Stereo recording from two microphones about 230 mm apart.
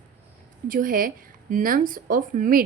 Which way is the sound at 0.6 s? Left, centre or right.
Right.